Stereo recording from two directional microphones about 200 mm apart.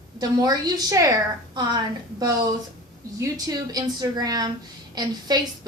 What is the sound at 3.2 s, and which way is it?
A woman's voice, 20° right (ahead or behind).